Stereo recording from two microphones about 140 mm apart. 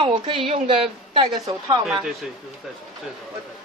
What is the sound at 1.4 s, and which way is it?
Speech, 30° right (ahead or behind).